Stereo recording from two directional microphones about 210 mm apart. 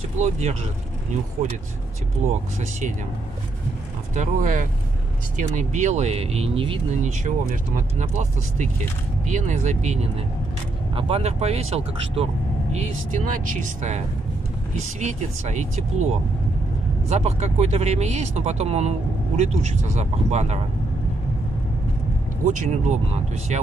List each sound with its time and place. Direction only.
0.2 s speech: 30° right (ahead or behind)
4.1 s speech: 35° right (ahead or behind)
7.2 s speech: 35° right (ahead or behind)
22.4 s speech: 35° right (ahead or behind)